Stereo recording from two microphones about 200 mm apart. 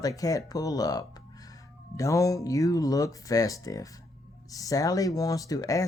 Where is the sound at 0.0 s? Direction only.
15° left (ahead or behind).